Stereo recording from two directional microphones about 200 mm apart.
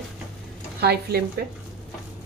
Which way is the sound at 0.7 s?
55° right (ahead or behind).